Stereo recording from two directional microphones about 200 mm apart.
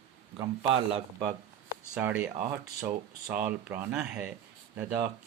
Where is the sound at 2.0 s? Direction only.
5° right (ahead or behind).